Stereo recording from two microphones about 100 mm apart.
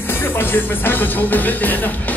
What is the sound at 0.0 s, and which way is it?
Music, 20° left (ahead or behind).